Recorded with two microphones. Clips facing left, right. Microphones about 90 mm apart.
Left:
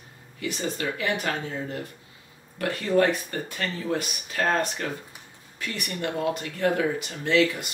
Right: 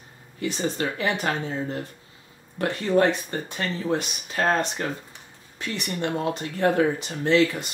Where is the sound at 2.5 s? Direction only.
25° right (ahead or behind).